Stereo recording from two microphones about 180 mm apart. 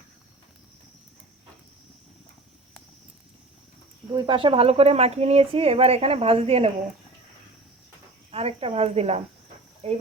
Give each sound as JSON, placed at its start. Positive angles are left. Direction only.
{"t": 4.1, "sound": "speech", "side_deg": -30}
{"t": 8.3, "sound": "speech", "side_deg": -35}